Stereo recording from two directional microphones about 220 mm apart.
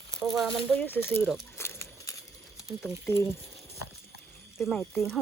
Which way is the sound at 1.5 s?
15° left (ahead or behind).